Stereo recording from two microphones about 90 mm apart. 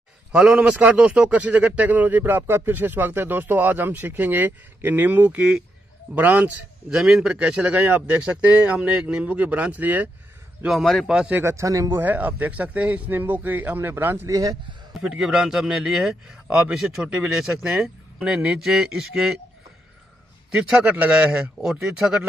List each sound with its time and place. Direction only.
0.3 s a man's voice: 10° right (ahead or behind)
7.0 s a man's voice: 5° right (ahead or behind)
10.7 s speech: centre (ahead or behind)
11.1 s a man's voice: 15° right (ahead or behind)
11.4 s speech: 35° right (ahead or behind)
11.9 s a man's voice: 20° right (ahead or behind)
14.2 s a man's voice: 45° right (ahead or behind)
15.0 s a man's voice: 5° right (ahead or behind)
20.5 s a man's voice: 15° right (ahead or behind)
21.3 s speech: 5° right (ahead or behind)